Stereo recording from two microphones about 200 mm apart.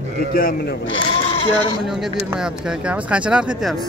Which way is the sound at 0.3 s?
45° left (ahead or behind).